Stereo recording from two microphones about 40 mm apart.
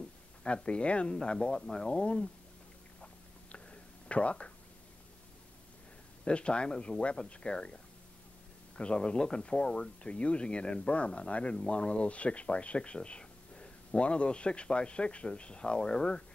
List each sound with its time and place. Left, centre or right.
0.4 s speech: left
3.5 s a sound: left
6.2 s speech: left